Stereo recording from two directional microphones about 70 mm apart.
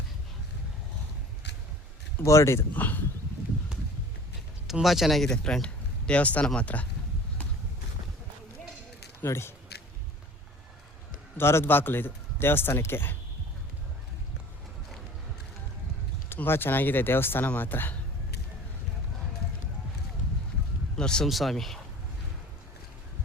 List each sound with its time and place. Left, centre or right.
2.2 s a man's voice: left
2.7 s speech: left
4.6 s speech: centre
9.2 s a man's voice: left
11.3 s a man's voice: left
16.3 s speech: left
20.9 s speech: centre
21.2 s speech: centre